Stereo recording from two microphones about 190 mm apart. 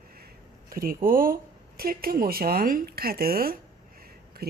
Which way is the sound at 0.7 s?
50° right (ahead or behind).